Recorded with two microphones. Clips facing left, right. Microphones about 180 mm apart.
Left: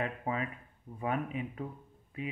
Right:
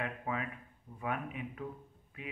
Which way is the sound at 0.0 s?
30° left (ahead or behind).